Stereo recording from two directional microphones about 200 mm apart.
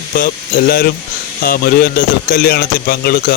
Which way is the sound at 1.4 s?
45° left (ahead or behind).